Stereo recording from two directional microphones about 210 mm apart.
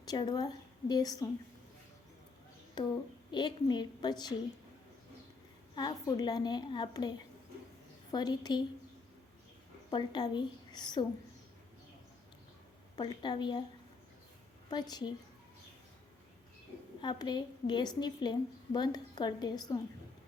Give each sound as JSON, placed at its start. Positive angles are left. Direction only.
{"t": 0.0, "sound": "a woman's voice", "side_deg": 20}
{"t": 2.8, "sound": "a woman's voice", "side_deg": 20}
{"t": 5.7, "sound": "a woman's voice", "side_deg": 20}
{"t": 9.9, "sound": "a woman's voice", "side_deg": 20}
{"t": 13.0, "sound": "a woman's voice", "side_deg": 20}
{"t": 14.7, "sound": "a woman's voice", "side_deg": 20}
{"t": 17.0, "sound": "a woman's voice", "side_deg": 20}